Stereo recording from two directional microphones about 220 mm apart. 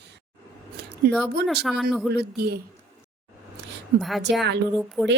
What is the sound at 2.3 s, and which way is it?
Speech, 45° right (ahead or behind).